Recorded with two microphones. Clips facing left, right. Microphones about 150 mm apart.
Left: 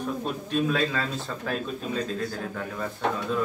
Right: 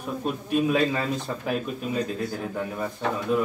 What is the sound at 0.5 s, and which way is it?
Speech, 10° right (ahead or behind).